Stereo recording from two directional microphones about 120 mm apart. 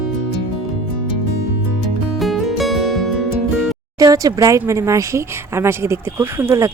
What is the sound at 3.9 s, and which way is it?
Speech, 30° right (ahead or behind).